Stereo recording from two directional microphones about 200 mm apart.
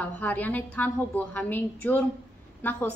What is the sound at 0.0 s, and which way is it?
A woman's voice, 10° left (ahead or behind).